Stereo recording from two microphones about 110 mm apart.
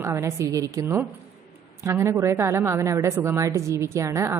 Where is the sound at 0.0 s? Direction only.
25° right (ahead or behind).